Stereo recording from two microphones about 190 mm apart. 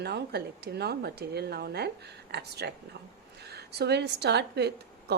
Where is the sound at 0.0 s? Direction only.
60° right (ahead or behind).